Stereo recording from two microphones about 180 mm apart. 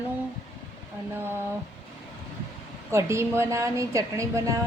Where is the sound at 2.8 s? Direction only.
15° right (ahead or behind).